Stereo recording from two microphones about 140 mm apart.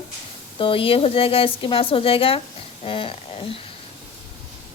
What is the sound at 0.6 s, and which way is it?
A woman's voice, 40° left (ahead or behind).